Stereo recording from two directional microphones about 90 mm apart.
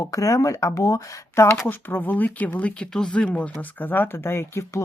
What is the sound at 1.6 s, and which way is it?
Speech, 20° left (ahead or behind).